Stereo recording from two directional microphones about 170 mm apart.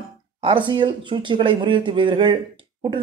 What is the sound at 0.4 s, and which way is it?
A man's voice, 30° right (ahead or behind).